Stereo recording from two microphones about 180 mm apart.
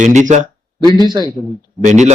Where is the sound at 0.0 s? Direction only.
40° right (ahead or behind).